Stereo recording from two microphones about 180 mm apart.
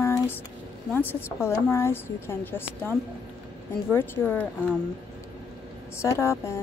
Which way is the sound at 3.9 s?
10° left (ahead or behind).